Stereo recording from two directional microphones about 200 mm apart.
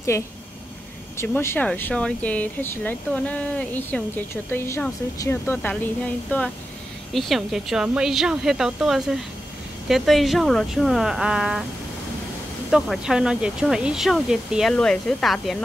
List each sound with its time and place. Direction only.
0.1 s speech: 15° left (ahead or behind); by 11.6 s 5° right (ahead or behind)
12.7 s speech: centre (ahead or behind)